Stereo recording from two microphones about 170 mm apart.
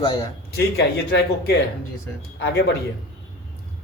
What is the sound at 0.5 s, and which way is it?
A man's voice, 70° left (ahead or behind).